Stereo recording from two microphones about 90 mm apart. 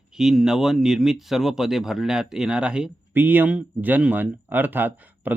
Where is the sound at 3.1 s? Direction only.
20° right (ahead or behind).